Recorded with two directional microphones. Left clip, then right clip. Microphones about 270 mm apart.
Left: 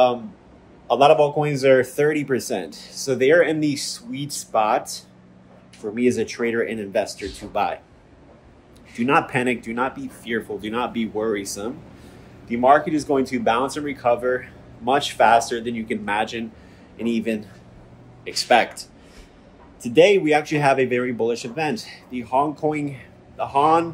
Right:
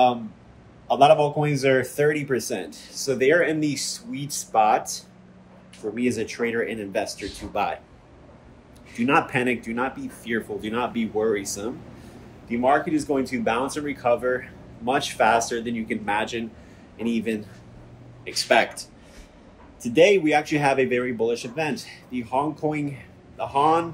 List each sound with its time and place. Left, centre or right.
0.8 s speech: centre
8.9 s speech: centre